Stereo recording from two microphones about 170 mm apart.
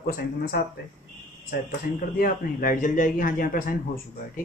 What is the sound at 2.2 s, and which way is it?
Speech, 55° left (ahead or behind).